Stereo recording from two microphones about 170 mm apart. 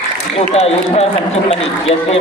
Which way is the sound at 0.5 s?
40° left (ahead or behind).